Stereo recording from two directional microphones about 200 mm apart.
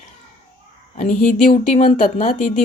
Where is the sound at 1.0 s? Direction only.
35° left (ahead or behind).